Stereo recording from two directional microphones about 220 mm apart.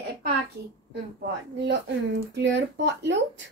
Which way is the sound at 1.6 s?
50° right (ahead or behind).